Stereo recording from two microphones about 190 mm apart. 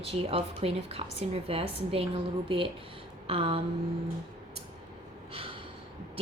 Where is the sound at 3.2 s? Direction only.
30° right (ahead or behind).